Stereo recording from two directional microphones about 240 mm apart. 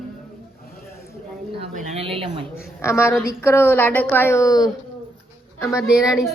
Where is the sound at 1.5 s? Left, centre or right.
Right.